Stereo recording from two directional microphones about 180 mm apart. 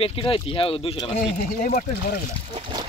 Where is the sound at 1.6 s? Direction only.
55° left (ahead or behind).